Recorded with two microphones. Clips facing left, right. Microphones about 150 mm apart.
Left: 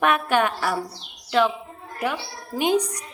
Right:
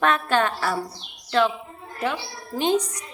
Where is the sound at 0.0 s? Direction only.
15° left (ahead or behind).